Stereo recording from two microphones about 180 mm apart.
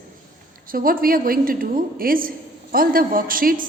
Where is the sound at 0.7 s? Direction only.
55° right (ahead or behind).